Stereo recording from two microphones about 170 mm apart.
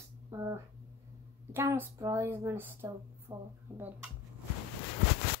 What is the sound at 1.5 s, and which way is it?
Speech, 15° right (ahead or behind).